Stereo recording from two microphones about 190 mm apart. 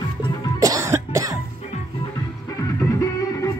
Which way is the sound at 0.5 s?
20° right (ahead or behind).